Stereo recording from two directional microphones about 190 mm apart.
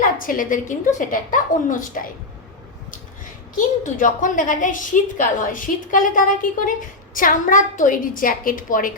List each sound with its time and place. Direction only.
0.0 s a woman's voice: 45° left (ahead or behind)
3.8 s a woman's voice: 45° left (ahead or behind)